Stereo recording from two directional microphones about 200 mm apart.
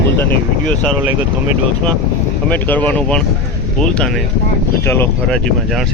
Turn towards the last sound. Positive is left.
turn(degrees=10)  # may be behind; listen again after turning